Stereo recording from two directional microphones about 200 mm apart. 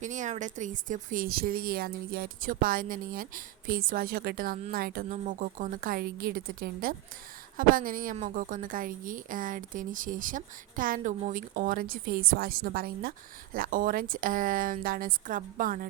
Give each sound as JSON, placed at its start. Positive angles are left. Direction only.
{"t": 0.0, "sound": "speech", "side_deg": -40}